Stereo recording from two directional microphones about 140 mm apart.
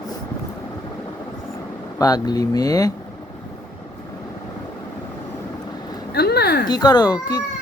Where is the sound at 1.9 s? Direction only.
25° left (ahead or behind).